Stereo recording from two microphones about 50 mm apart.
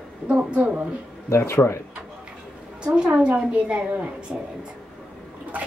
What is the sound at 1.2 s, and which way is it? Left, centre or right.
Speech, left.